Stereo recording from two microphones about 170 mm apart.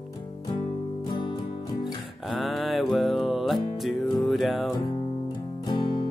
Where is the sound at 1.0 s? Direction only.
25° left (ahead or behind).